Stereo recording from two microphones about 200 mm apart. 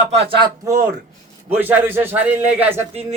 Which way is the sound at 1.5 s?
10° right (ahead or behind).